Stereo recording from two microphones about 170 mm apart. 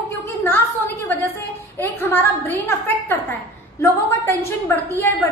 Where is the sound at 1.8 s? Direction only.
10° left (ahead or behind).